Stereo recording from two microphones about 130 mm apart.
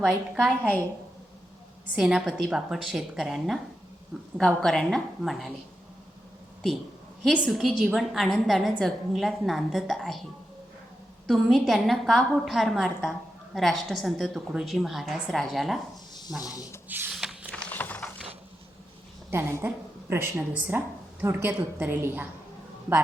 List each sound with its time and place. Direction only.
0.0 s a woman's voice: centre (ahead or behind)
2.0 s a woman's voice: 5° right (ahead or behind)
7.3 s a woman's voice: 5° left (ahead or behind)
11.3 s a woman's voice: centre (ahead or behind)
16.9 s a sound: 10° right (ahead or behind)
17.5 s ratchet: 10° left (ahead or behind)
19.3 s a woman's voice: 20° right (ahead or behind)